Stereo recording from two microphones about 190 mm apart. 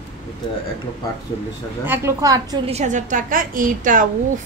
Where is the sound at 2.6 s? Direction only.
35° right (ahead or behind).